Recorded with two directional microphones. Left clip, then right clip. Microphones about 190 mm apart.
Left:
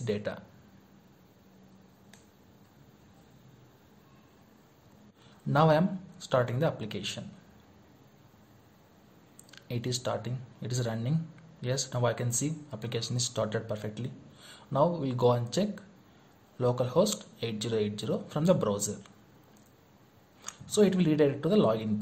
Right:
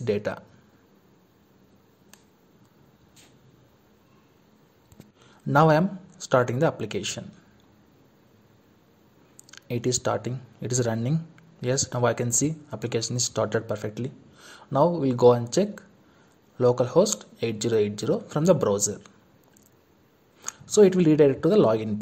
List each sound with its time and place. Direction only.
0.0 s speech: 35° right (ahead or behind)
5.5 s speech: 35° right (ahead or behind)
9.5 s speech: 35° right (ahead or behind)
20.4 s speech: 35° right (ahead or behind)